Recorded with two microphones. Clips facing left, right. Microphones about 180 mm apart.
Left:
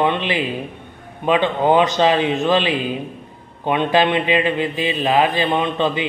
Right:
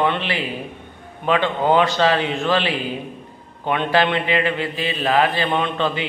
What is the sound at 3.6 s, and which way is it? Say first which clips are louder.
A man's voice: left 2 dB; 20° left (ahead or behind).